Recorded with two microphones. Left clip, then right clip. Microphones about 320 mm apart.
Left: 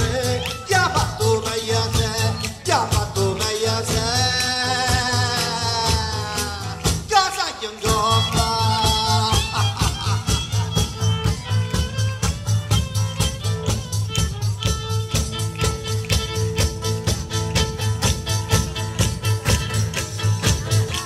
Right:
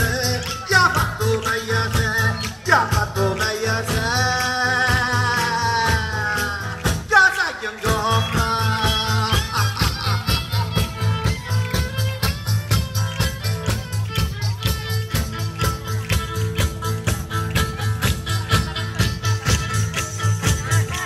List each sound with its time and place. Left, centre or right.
0.3 s music: centre
15.1 s music: centre